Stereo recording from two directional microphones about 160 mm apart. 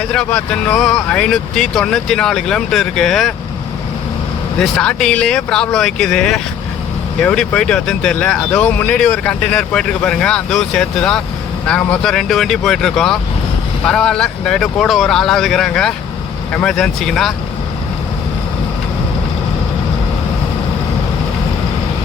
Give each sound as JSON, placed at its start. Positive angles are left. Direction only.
{"t": 0.1, "sound": "speech", "side_deg": 5}
{"t": 4.6, "sound": "speech", "side_deg": 5}